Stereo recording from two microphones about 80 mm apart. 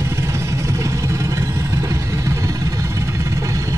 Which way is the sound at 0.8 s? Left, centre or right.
Right.